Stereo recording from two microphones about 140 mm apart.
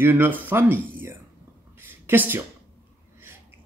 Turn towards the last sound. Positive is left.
turn(degrees=-15)  # may be behind; listen again after turning